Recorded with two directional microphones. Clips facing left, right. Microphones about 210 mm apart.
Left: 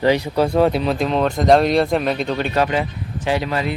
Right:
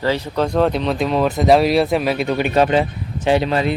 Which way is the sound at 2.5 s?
25° right (ahead or behind).